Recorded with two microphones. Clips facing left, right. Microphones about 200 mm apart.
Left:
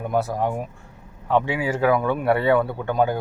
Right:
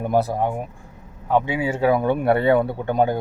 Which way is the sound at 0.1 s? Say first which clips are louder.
Right 3 dB; 35° right (ahead or behind).